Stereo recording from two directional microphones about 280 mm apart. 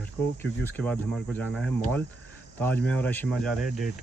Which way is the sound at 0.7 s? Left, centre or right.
Centre.